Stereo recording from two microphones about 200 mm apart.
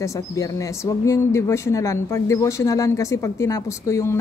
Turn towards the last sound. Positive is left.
turn(degrees=15)  # may be behind; listen again after turning